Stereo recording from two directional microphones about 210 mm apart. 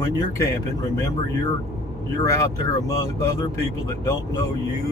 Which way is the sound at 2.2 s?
15° left (ahead or behind).